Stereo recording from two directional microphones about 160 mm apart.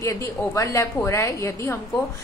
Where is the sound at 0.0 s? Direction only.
20° left (ahead or behind).